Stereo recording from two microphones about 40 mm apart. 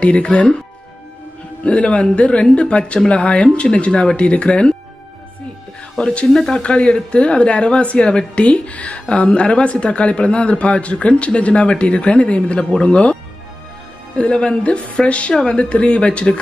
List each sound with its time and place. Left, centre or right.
0.0 s speech: left
1.6 s a woman's voice: left
5.9 s speech: left
6.3 s speech: centre
6.6 s speech: left
12.4 s a woman's voice: left